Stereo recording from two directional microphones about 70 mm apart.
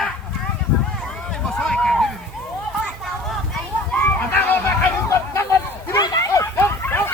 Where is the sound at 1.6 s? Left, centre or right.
Centre.